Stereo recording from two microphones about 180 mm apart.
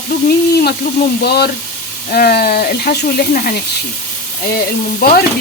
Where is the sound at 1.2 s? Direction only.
60° left (ahead or behind).